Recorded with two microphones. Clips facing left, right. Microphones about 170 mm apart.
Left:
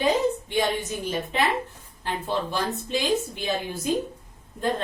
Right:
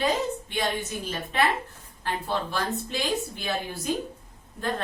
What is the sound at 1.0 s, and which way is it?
A woman's voice, 15° left (ahead or behind).